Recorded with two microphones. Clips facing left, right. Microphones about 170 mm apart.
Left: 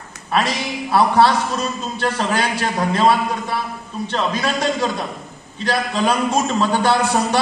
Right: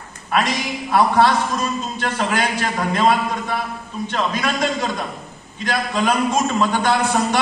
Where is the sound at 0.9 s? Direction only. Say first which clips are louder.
Left 1 dB; 30° left (ahead or behind).